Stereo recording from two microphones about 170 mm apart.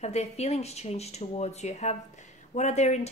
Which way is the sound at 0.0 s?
40° left (ahead or behind).